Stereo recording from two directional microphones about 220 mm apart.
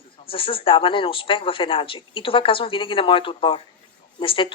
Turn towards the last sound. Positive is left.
turn(degrees=25)  # may be behind; listen again after turning